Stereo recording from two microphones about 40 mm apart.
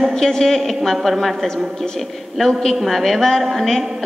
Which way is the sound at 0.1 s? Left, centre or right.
Centre.